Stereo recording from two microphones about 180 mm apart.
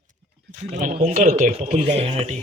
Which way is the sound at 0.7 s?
40° right (ahead or behind).